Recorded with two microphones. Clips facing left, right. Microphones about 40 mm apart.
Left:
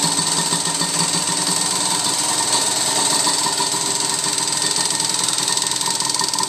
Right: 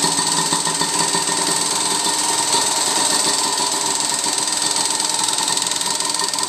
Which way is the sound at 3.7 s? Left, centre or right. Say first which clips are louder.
Right 1 dB; centre.